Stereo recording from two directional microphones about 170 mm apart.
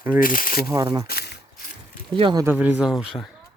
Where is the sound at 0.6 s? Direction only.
25° right (ahead or behind).